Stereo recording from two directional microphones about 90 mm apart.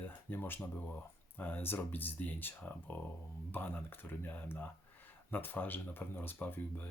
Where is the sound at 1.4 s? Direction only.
20° left (ahead or behind).